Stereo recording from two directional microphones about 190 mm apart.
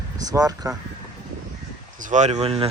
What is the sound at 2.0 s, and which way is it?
Speech, 40° right (ahead or behind).